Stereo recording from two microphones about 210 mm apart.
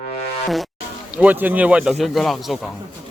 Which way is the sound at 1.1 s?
5° right (ahead or behind).